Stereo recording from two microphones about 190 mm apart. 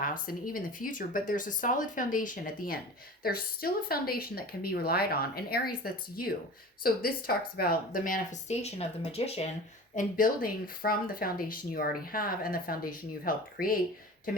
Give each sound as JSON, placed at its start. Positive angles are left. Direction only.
{"t": 0.0, "sound": "speech", "side_deg": 45}
{"t": 9.9, "sound": "speech", "side_deg": 45}